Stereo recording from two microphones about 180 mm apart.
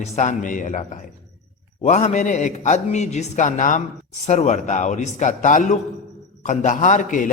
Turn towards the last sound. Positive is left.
turn(degrees=45)  # may be behind; listen again after turning